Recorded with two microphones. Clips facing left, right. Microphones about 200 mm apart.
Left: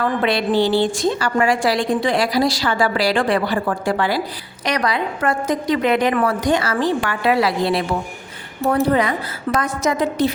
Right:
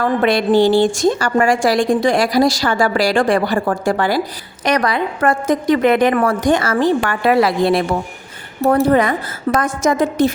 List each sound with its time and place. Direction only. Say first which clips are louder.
0.0 s a woman's voice: right 4 dB; 45° right (ahead or behind)